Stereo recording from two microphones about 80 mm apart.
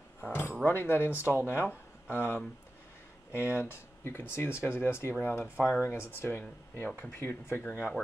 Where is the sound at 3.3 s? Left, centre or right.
Left.